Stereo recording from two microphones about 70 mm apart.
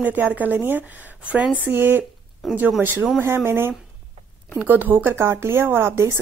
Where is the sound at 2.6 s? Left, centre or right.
Right.